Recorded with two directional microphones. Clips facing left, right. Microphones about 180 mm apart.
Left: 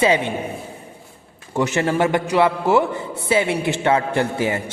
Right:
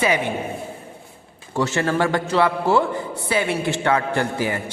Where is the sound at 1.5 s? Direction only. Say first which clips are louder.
Left 2 dB; 20° left (ahead or behind).